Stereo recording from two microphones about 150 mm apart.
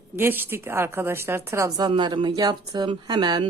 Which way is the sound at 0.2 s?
15° right (ahead or behind).